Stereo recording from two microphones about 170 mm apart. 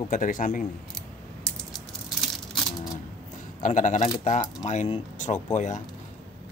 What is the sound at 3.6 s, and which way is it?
Speech, 45° left (ahead or behind).